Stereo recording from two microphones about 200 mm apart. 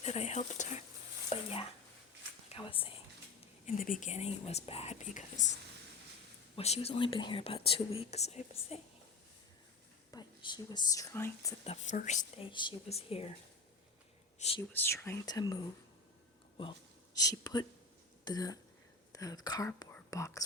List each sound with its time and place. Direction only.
0.0 s speech: 35° left (ahead or behind)
3.7 s speech: 45° left (ahead or behind)
6.6 s speech: 30° left (ahead or behind)
10.1 s speech: 20° left (ahead or behind)
11.6 s speech: 30° left (ahead or behind)
12.5 s speech: 25° left (ahead or behind)
14.3 s speech: 30° left (ahead or behind)
14.7 s speech: 10° left (ahead or behind)
17.2 s speech: 20° left (ahead or behind)